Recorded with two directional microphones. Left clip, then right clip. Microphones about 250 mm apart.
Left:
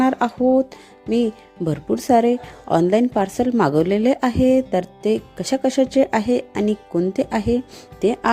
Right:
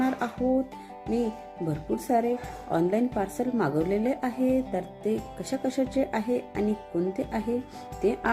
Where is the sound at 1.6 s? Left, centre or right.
Left.